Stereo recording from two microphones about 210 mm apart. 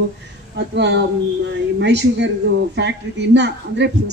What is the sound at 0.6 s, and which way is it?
A woman's voice, 55° right (ahead or behind).